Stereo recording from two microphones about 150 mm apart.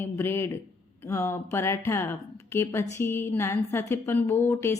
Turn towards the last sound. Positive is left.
turn(degrees=15)  # may be behind; listen again after turning